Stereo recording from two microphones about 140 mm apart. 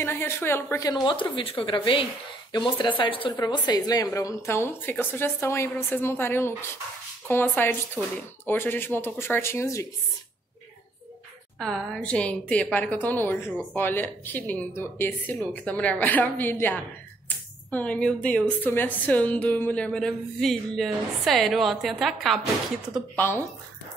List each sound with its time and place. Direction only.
0.0 s a woman's voice: 15° left (ahead or behind)
1.0 s a woman's voice: 35° left (ahead or behind); by 9.8 s 20° left (ahead or behind)
11.5 s a woman's voice: 5° left (ahead or behind)
23.1 s speech: 15° left (ahead or behind)